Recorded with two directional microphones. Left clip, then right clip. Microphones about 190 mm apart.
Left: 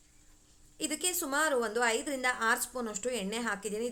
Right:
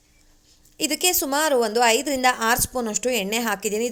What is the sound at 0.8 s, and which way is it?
A woman's voice, 35° right (ahead or behind).